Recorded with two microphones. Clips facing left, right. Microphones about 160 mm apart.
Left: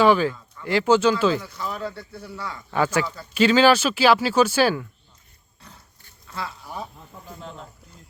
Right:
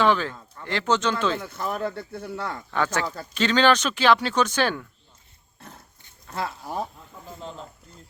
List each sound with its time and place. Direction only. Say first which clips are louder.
0.0 s speech: left 4 dB; 10° left (ahead or behind)
1.4 s speech: right 2 dB; 50° right (ahead or behind)
2.6 s speech: left 4 dB; 10° left (ahead or behind)
5.5 s roaring cats: right 4 dB; 50° right (ahead or behind)
6.2 s a sound: right 3 dB; 50° right (ahead or behind)
7.3 s speech: right 1 dB; 30° right (ahead or behind)